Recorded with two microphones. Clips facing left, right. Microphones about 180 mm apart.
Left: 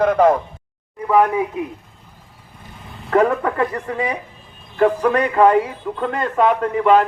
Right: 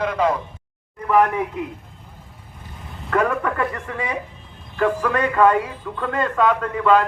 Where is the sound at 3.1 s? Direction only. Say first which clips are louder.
Left 4 dB; 30° left (ahead or behind).